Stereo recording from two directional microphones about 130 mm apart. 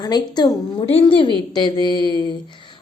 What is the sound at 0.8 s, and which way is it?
A woman's voice, 50° left (ahead or behind).